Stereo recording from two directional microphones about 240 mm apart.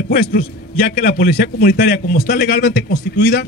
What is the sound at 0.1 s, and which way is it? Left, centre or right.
A man's voice, left.